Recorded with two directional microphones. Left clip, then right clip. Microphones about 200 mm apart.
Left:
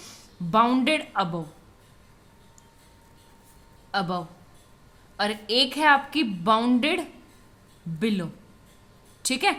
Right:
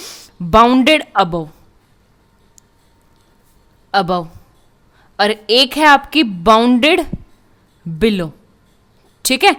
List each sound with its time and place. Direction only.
0.0 s speech: 45° right (ahead or behind)
3.9 s a woman's voice: 50° right (ahead or behind)